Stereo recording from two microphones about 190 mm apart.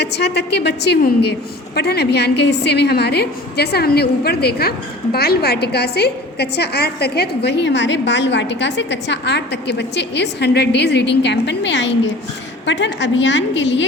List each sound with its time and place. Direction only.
0.0 s a woman's voice: 60° left (ahead or behind)